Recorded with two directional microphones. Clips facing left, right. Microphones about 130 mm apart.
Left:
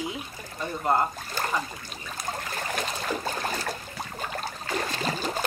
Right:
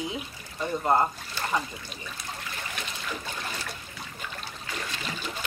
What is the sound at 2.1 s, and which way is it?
Trickle, 45° left (ahead or behind).